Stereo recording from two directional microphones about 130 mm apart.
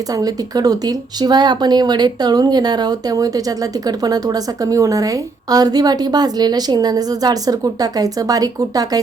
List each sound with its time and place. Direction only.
0.2 s a woman's voice: 30° right (ahead or behind)